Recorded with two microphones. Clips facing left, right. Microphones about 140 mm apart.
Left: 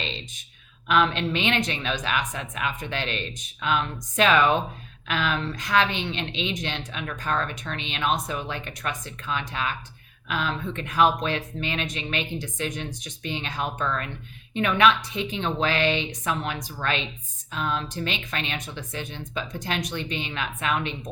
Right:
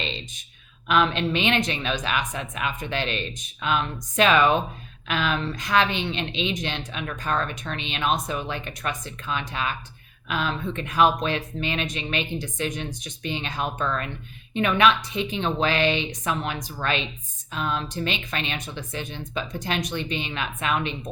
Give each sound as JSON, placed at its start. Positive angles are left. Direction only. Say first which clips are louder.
{"t": 0.9, "sound": "a woman's voice", "louder": "right 1 dB", "side_deg": -20}
{"t": 5.0, "sound": "a woman's voice", "louder": "right 1 dB", "side_deg": -20}